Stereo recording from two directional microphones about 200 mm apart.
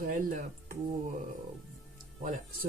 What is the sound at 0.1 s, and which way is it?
Speech, 45° right (ahead or behind).